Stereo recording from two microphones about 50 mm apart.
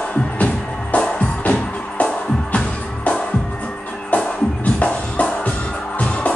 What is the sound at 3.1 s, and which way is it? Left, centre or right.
Music, left.